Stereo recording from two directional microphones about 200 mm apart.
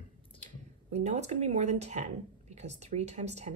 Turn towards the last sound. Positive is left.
turn(degrees=-35)  # may be behind; listen again after turning